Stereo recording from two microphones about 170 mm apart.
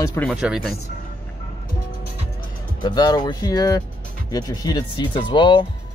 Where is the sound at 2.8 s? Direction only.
25° left (ahead or behind).